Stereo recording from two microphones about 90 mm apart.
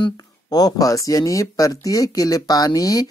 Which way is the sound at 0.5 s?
45° left (ahead or behind).